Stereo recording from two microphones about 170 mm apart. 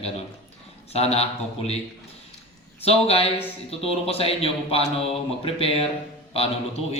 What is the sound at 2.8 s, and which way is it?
A man's voice, 35° left (ahead or behind).